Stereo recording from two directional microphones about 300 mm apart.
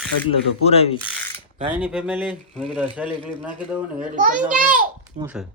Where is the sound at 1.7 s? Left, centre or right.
Centre.